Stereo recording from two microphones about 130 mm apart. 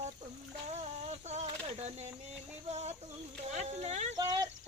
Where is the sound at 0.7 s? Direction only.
60° right (ahead or behind).